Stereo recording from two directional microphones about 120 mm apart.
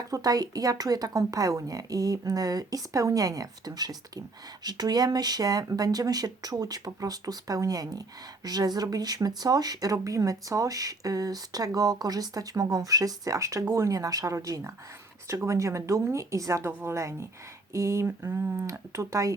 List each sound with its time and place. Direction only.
0.1 s speech: 30° right (ahead or behind)